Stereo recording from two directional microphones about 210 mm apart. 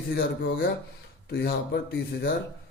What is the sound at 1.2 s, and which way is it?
Speech, 50° left (ahead or behind).